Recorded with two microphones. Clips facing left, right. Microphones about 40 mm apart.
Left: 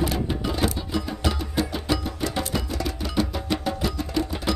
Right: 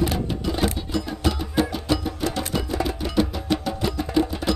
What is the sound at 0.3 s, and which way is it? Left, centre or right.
Music, centre.